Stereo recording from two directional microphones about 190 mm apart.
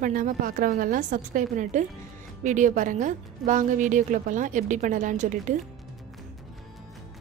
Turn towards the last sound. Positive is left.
turn(degrees=-40)  # may be behind; listen again after turning